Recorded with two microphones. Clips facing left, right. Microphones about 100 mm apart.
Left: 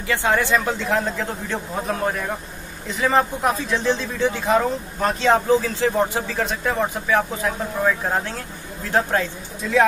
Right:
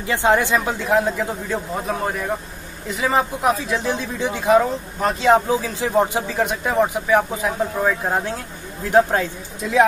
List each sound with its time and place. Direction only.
0.0 s a man's voice: 20° right (ahead or behind)